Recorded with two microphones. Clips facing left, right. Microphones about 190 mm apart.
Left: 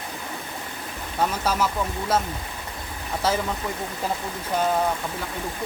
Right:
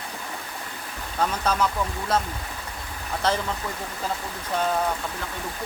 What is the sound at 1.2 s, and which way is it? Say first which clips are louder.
Speech: even; 5° left (ahead or behind).